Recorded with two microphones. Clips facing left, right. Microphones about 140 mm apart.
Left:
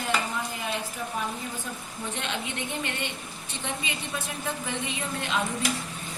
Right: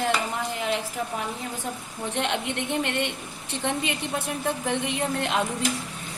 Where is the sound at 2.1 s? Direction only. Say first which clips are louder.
Right 7 dB; 65° right (ahead or behind).